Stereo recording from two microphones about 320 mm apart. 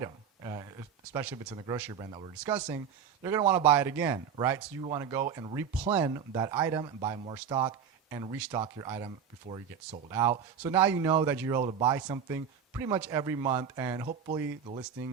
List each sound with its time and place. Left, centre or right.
0.0 s speech: centre